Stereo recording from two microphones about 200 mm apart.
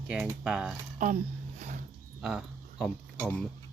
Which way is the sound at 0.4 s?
5° right (ahead or behind).